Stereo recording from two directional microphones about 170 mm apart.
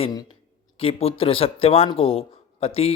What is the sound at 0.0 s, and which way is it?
Speech, 25° left (ahead or behind).